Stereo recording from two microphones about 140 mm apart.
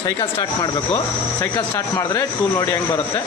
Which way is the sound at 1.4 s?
20° left (ahead or behind).